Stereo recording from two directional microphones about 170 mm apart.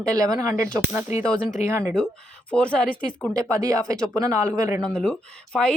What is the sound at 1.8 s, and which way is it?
A woman's voice, 5° left (ahead or behind).